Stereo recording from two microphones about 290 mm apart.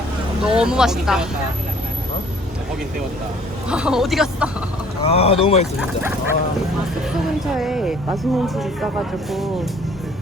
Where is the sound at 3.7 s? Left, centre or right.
Centre.